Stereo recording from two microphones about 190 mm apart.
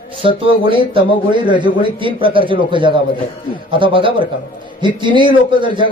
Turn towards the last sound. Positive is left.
turn(degrees=-25)  # may be behind; listen again after turning